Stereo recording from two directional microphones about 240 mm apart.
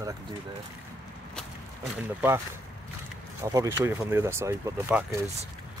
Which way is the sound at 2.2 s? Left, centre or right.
Centre.